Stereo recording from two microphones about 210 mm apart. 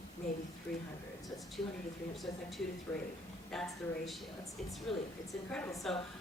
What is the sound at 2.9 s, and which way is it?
A man's voice, 10° left (ahead or behind).